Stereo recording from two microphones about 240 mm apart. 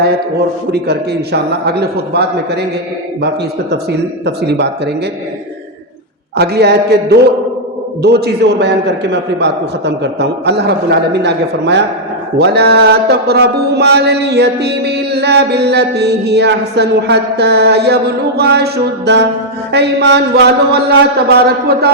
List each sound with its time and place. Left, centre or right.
0.7 s mantra: right
6.3 s mantra: right